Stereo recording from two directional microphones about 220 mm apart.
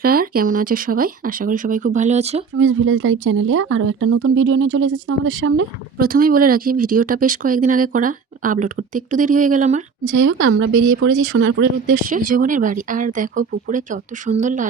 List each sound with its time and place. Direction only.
0.0 s speech: 40° right (ahead or behind)
2.6 s speech: 65° right (ahead or behind)
6.0 s speech: 40° right (ahead or behind)
10.0 s speech: 70° right (ahead or behind)
11.9 s speech: 40° right (ahead or behind)